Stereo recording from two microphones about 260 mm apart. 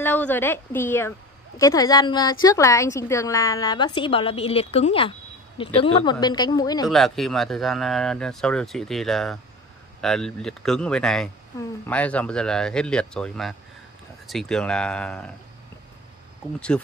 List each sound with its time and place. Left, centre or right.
0.0 s a woman's voice: centre
6.9 s speech: centre
16.5 s speech: centre